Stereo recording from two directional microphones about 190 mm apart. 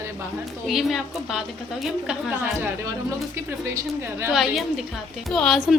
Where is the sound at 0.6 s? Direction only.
Centre (ahead or behind).